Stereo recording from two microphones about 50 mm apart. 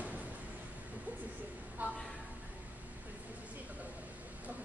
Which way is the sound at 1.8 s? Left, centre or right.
Right.